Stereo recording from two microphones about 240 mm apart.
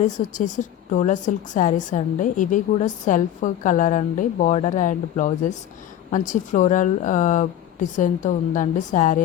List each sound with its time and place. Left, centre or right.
0.0 s a woman's voice: left